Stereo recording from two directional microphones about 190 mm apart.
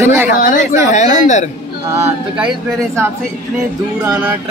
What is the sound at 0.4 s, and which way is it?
Speech, 45° left (ahead or behind).